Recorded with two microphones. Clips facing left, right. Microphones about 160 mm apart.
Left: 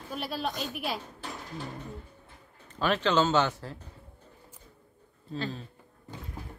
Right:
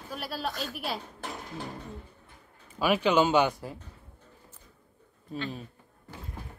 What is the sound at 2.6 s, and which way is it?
Speech, 10° right (ahead or behind).